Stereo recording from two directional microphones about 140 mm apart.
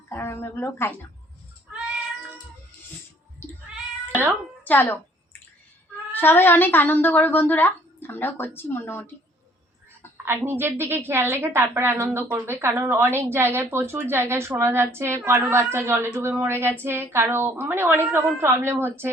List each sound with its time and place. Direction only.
0.1 s speech: 15° left (ahead or behind)
4.6 s a sound: 15° left (ahead or behind)
6.1 s speech: 15° left (ahead or behind)
10.2 s a woman's voice: 15° right (ahead or behind)